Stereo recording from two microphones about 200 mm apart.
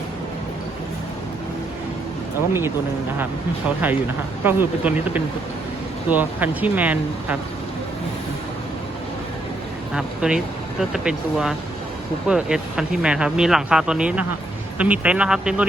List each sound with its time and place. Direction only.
2.5 s speech: 10° right (ahead or behind)
4.4 s speech: 10° right (ahead or behind)
9.9 s speech: 5° right (ahead or behind)